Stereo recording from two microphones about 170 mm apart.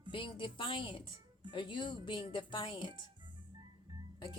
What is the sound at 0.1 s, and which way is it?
Speech, 30° left (ahead or behind).